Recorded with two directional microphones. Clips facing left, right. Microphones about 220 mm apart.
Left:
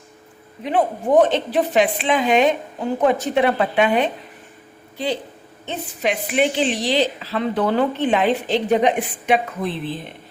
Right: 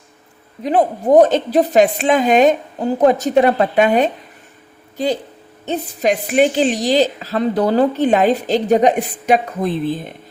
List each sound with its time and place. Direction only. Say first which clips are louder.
0.6 s a woman's voice: right 4 dB; 40° right (ahead or behind)
5.6 s a woman's voice: right 6 dB; 40° right (ahead or behind)